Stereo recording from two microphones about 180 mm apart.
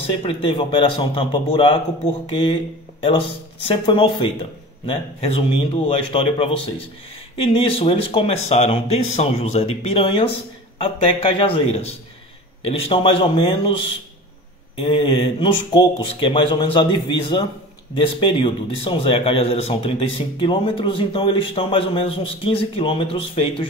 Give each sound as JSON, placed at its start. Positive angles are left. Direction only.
{"t": 0.2, "sound": "speech", "side_deg": 30}
{"t": 3.6, "sound": "speech", "side_deg": 25}